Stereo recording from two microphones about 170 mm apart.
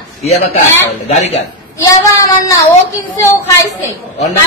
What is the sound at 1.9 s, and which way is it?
A woman's voice, 20° left (ahead or behind).